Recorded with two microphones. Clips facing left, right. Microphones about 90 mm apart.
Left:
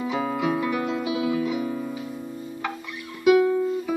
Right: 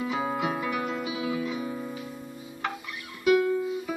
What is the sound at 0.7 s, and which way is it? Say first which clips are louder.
Music: left 4 dB; 5° right (ahead or behind).